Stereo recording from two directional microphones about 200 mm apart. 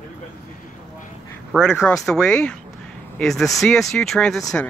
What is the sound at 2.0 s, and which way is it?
Speech, 5° left (ahead or behind).